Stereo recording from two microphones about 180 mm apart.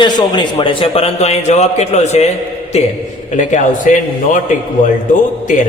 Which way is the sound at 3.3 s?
45° left (ahead or behind).